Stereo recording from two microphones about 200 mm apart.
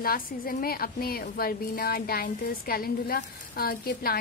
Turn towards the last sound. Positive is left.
turn(degrees=50)  # may be behind; listen again after turning